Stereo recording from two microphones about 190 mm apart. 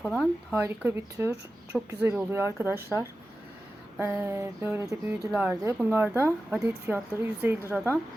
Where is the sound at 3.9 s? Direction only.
10° right (ahead or behind).